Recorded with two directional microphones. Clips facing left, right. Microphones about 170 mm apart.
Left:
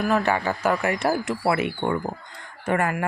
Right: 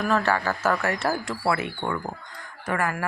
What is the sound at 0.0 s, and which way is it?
Speech, 15° left (ahead or behind).